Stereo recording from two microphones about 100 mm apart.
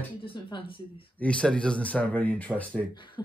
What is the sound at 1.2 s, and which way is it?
Speech, 10° left (ahead or behind).